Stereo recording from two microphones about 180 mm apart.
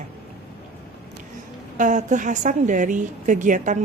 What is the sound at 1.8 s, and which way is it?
A woman's voice, 45° right (ahead or behind).